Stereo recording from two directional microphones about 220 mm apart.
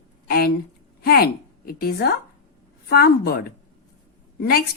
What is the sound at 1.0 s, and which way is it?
A woman's voice, 45° left (ahead or behind).